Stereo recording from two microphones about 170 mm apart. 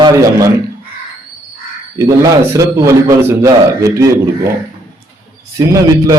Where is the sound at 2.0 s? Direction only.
15° right (ahead or behind).